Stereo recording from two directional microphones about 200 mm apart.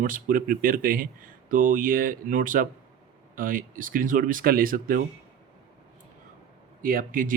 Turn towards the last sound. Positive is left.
turn(degrees=-45)  # may be behind; listen again after turning